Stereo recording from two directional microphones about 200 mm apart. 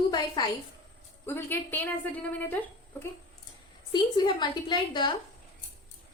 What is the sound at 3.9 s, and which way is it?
A woman's voice, 20° left (ahead or behind).